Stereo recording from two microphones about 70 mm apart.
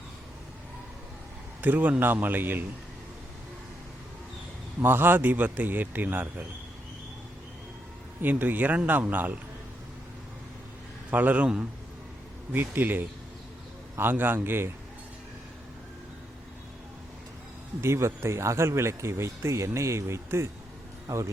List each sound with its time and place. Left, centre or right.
1.6 s a man's voice: right
4.8 s a man's voice: right
8.2 s a man's voice: right
11.1 s a man's voice: right
12.5 s a man's voice: right
17.7 s speech: right